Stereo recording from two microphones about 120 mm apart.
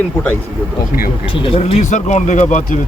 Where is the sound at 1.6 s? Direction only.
80° left.